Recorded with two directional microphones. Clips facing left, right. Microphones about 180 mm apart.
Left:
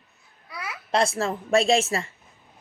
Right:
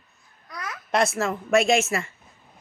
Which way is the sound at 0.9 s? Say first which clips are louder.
Even; 30° left (ahead or behind).